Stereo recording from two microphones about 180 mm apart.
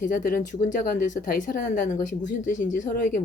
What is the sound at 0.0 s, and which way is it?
Speech, 50° left (ahead or behind).